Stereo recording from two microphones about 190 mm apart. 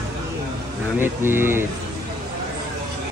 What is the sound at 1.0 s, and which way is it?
Speech, 10° right (ahead or behind).